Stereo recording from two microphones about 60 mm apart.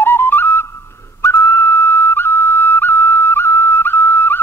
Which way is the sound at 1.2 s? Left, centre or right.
Left.